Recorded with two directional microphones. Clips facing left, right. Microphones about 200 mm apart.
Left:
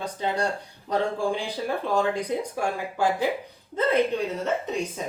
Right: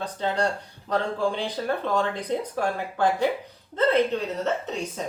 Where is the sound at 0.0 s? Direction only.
10° left (ahead or behind).